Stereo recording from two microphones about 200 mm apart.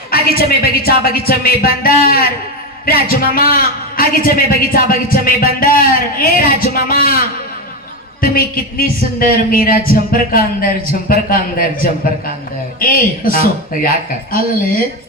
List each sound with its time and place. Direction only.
0.1 s a man's voice: 50° left (ahead or behind)
8.2 s a man's voice: 45° left (ahead or behind)